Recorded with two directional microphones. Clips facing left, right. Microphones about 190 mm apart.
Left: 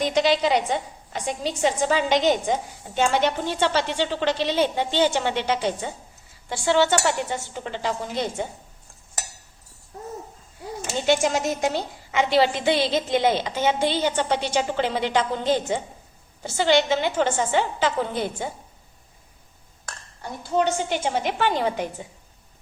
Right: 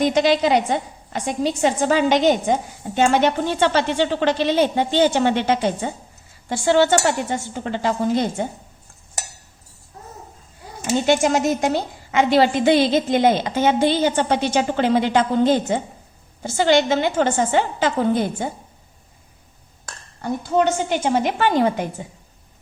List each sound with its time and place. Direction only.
0.0 s a woman's voice: 50° right (ahead or behind)
10.8 s a woman's voice: 50° right (ahead or behind)
20.2 s a woman's voice: 50° right (ahead or behind)